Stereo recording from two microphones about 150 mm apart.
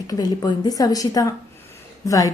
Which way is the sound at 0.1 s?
25° left (ahead or behind).